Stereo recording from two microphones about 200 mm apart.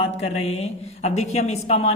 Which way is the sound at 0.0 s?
30° left (ahead or behind).